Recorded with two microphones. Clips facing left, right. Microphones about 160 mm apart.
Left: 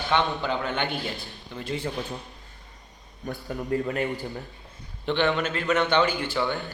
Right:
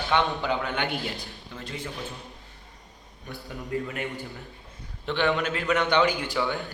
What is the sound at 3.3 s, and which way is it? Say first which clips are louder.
Speech: left 4 dB; 40° left (ahead or behind).